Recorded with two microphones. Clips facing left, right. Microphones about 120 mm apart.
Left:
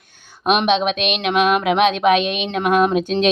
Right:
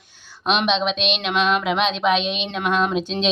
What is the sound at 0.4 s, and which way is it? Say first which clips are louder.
Speech: left 4 dB; 50° left (ahead or behind).